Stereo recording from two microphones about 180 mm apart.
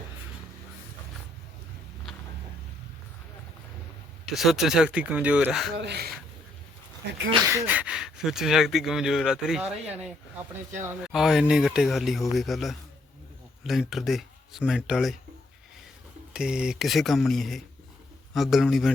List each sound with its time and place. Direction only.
4.3 s speech: centre (ahead or behind)
5.7 s speech: 70° right (ahead or behind)
7.4 s speech: 15° right (ahead or behind)
11.0 s speech: centre (ahead or behind)
16.3 s speech: 5° right (ahead or behind)